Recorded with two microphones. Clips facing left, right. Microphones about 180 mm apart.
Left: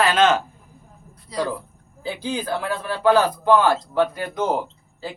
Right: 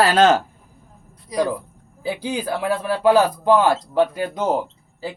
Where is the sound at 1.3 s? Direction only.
15° right (ahead or behind).